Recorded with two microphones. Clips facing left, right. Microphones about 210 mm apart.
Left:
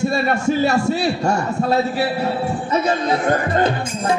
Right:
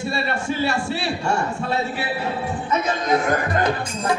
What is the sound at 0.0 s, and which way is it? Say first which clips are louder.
A man's voice: left 7 dB; 45° left (ahead or behind).